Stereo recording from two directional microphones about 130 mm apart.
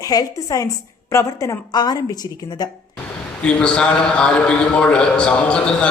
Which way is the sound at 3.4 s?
5° left (ahead or behind).